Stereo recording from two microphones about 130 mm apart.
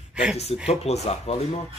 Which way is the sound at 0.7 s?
55° left (ahead or behind).